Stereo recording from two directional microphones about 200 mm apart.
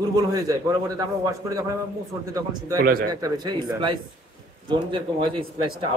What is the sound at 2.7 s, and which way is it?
Speech, 45° right (ahead or behind).